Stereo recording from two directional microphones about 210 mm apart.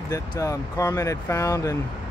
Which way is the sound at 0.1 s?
15° left (ahead or behind).